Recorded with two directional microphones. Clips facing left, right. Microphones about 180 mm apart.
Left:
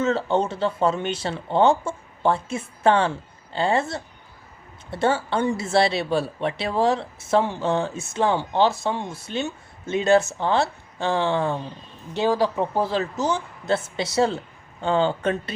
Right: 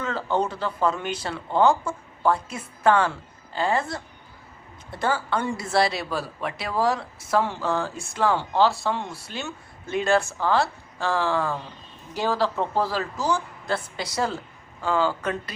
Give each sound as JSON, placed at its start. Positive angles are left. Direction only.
{"t": 0.0, "sound": "speech", "side_deg": 25}